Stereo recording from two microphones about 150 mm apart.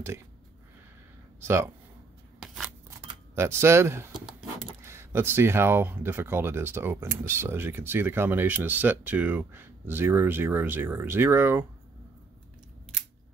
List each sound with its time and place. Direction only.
1.4 s speech: 15° right (ahead or behind)
2.4 s scissors: 5° right (ahead or behind)
3.3 s speech: 15° right (ahead or behind)